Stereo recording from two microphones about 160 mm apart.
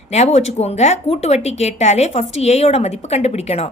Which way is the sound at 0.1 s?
45° left (ahead or behind).